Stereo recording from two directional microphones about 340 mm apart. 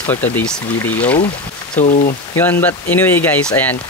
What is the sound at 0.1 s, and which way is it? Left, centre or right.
Speech, centre.